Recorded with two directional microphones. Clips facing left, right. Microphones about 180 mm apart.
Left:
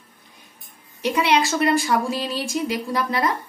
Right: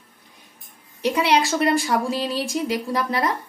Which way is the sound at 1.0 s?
35° right (ahead or behind).